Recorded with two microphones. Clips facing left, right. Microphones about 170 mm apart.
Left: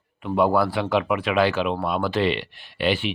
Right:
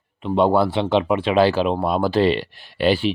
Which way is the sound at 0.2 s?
25° right (ahead or behind).